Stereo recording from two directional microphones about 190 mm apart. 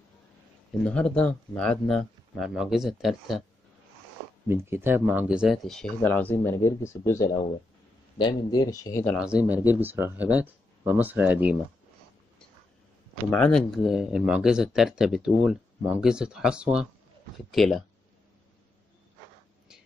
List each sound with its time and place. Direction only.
0.8 s speech: 5° left (ahead or behind)
4.5 s speech: 10° right (ahead or behind); by 9.0 s 20° left (ahead or behind)
9.0 s speech: 5° right (ahead or behind)
13.3 s speech: 5° left (ahead or behind)